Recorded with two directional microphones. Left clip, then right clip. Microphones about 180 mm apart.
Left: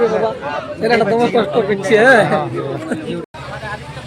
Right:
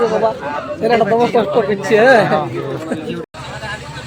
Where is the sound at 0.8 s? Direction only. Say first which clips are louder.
Right 1 dB; 15° left (ahead or behind).